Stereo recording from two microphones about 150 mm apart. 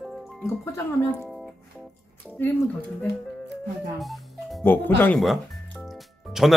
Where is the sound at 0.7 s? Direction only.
15° left (ahead or behind).